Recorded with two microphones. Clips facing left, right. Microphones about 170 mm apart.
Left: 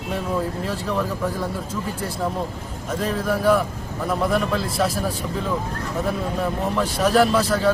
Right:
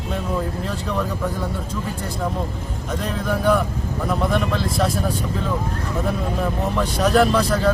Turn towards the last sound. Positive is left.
turn(degrees=0)  # may be behind; listen again after turning